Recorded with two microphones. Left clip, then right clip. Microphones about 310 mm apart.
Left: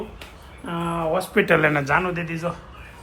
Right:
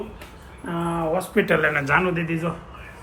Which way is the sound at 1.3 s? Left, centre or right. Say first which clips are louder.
Left 2 dB; left.